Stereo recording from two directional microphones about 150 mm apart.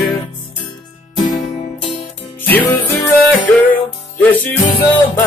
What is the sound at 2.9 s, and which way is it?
Music, 35° left (ahead or behind).